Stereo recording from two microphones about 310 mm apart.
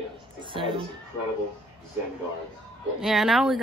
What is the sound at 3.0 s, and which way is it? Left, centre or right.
Speech, centre.